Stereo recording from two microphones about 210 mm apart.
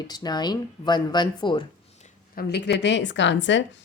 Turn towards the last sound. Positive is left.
turn(degrees=60)  # may be behind; listen again after turning